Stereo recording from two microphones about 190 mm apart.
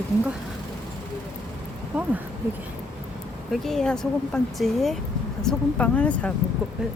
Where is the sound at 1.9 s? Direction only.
10° right (ahead or behind).